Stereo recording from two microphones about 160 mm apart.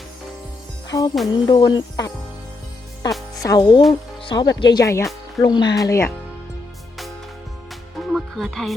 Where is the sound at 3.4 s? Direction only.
25° left (ahead or behind).